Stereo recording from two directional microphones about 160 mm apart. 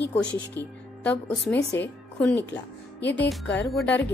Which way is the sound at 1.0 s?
10° left (ahead or behind).